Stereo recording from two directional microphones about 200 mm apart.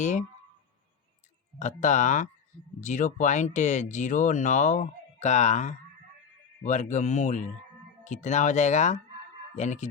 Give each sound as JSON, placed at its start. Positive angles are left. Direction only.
{"t": 0.0, "sound": "speech", "side_deg": 35}
{"t": 1.5, "sound": "speech", "side_deg": 35}